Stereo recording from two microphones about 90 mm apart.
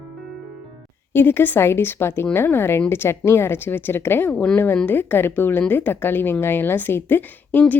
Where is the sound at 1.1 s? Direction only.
25° left (ahead or behind).